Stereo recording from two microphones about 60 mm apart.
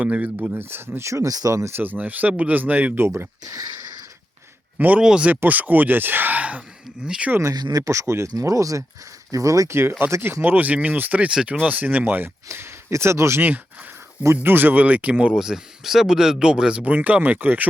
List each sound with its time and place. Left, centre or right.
0.0 s speech: right
0.7 s speech: right
1.7 s speech: right
4.8 s speech: right
5.3 s speech: right
7.4 s speech: right
8.3 s speech: right
9.6 s speech: right
10.4 s speech: right
12.5 s speech: right
14.4 s speech: right
15.4 s speech: centre
16.8 s speech: right